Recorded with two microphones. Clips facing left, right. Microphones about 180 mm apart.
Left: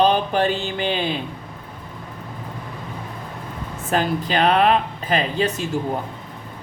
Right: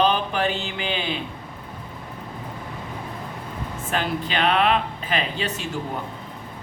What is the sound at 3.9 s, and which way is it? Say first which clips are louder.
Speech: left 5 dB; 40° left (ahead or behind).